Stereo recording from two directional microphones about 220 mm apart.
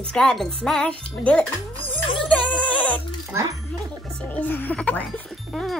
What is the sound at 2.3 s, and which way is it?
Music, 5° left (ahead or behind).